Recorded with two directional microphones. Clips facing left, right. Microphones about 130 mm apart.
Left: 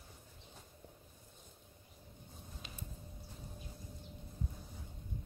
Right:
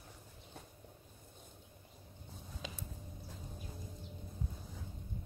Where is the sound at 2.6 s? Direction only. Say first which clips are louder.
Right 10 dB; 90° right.